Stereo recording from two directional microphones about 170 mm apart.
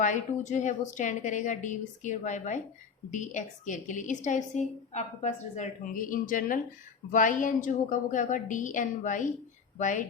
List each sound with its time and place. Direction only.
0.0 s a woman's voice: 45° left (ahead or behind)